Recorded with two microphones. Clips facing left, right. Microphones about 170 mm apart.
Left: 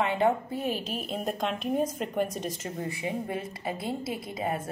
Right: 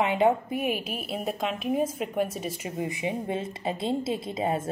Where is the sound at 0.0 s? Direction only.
20° right (ahead or behind).